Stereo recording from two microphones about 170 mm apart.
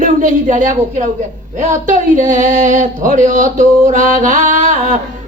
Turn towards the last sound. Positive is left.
turn(degrees=-50)  # may be behind; listen again after turning